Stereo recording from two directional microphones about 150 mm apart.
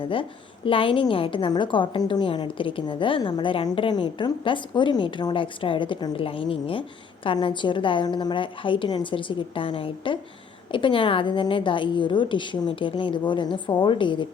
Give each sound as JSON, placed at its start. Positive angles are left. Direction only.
{"t": 0.0, "sound": "a woman's voice", "side_deg": 35}